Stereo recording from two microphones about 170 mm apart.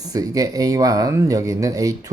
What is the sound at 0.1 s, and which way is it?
Speech, 20° right (ahead or behind).